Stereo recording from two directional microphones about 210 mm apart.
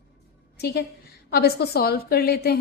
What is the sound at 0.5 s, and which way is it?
A woman's voice, 50° left (ahead or behind).